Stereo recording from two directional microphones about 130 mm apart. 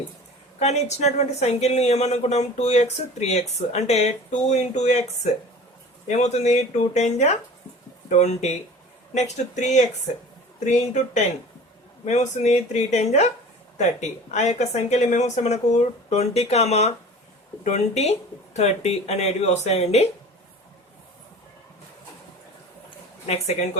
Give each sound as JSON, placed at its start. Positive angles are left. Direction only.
{"t": 0.6, "sound": "speech", "side_deg": 55}
{"t": 23.2, "sound": "speech", "side_deg": 55}